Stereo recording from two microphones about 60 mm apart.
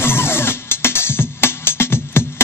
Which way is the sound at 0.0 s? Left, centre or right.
Left.